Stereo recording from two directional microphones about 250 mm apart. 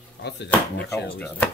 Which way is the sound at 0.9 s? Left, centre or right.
Centre.